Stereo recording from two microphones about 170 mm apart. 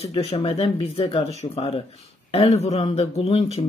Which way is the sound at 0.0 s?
35° left (ahead or behind).